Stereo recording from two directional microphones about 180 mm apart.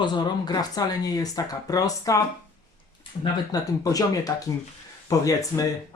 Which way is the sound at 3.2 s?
20° left (ahead or behind).